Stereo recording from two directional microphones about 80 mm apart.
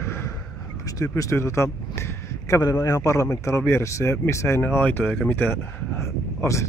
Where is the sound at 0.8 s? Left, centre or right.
Left.